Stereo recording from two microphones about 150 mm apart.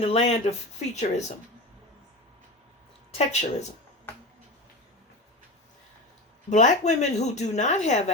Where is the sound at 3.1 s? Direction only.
45° left (ahead or behind).